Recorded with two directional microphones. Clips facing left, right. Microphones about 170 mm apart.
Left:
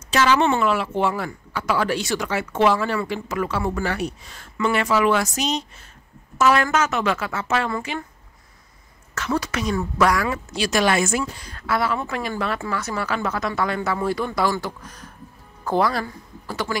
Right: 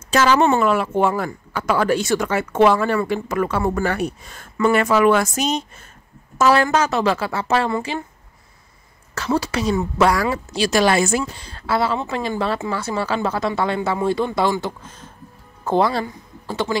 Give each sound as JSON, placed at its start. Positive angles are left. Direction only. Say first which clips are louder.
{"t": 0.1, "sound": "speech", "louder": "right 3 dB", "side_deg": -45}
{"t": 6.3, "sound": "a woman's voice", "louder": "right 3 dB", "side_deg": -35}
{"t": 9.1, "sound": "a woman's voice", "louder": "right 3 dB", "side_deg": -30}